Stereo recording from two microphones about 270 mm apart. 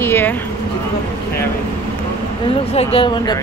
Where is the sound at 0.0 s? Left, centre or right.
Centre.